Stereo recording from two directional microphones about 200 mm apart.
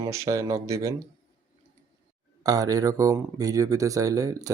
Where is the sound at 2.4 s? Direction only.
20° right (ahead or behind).